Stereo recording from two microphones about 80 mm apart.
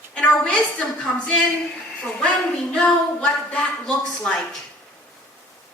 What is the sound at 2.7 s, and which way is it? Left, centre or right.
A woman's voice, centre.